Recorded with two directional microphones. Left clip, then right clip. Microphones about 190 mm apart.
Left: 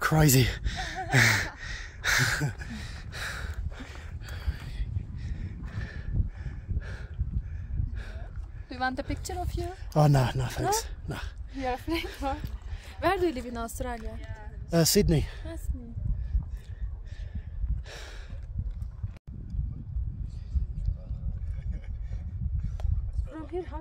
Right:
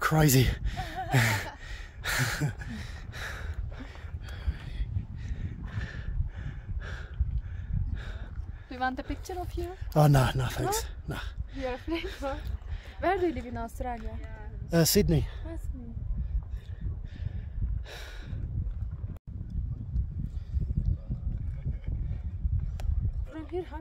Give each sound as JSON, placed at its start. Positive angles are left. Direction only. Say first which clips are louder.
{"t": 0.0, "sound": "a sound", "louder": "left 1 dB", "side_deg": 0}
{"t": 8.6, "sound": "speech", "louder": "left 1 dB", "side_deg": 20}
{"t": 9.9, "sound": "speech", "louder": "right 1 dB", "side_deg": -5}
{"t": 12.2, "sound": "a woman's voice", "louder": "left 2 dB", "side_deg": 55}
{"t": 14.7, "sound": "speech", "louder": "left 1 dB", "side_deg": 0}
{"t": 17.8, "sound": "sigh", "louder": "even", "side_deg": -5}
{"t": 23.3, "sound": "a sound", "louder": "even", "side_deg": -5}